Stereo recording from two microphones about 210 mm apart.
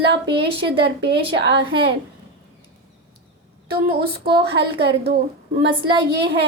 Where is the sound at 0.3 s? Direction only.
50° right (ahead or behind).